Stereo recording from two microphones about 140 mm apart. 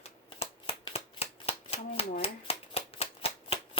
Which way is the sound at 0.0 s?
45° left (ahead or behind).